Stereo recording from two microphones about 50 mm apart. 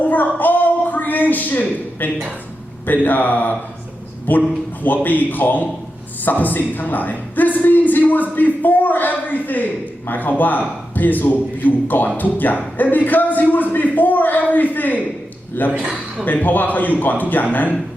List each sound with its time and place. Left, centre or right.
0.0 s a sound: left
2.8 s a man's voice: left
15.8 s a man's voice: centre
16.2 s a man's voice: left